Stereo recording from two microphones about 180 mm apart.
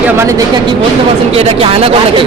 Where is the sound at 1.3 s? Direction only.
30° right (ahead or behind).